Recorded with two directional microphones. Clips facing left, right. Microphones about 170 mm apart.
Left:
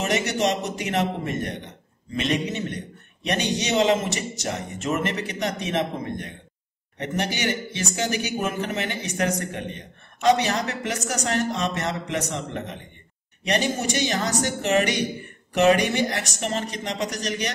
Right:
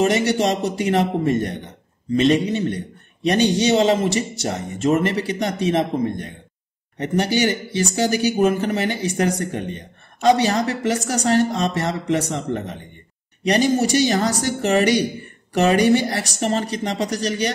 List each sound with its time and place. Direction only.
0.0 s a man's voice: 35° right (ahead or behind)